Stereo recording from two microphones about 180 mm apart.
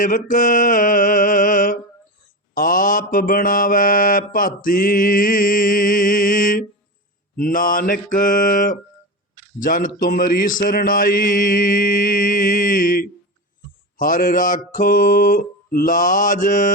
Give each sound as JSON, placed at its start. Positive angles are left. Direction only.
{"t": 0.0, "sound": "mantra", "side_deg": 50}